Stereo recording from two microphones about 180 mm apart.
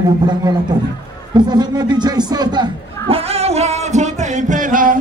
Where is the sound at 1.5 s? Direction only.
25° right (ahead or behind).